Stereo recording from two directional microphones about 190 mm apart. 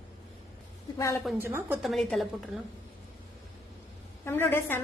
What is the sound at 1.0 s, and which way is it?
Speech, 15° left (ahead or behind).